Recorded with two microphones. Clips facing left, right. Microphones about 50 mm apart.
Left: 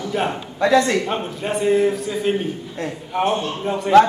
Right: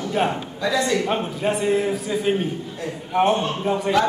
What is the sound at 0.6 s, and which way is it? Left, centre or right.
Speech, left.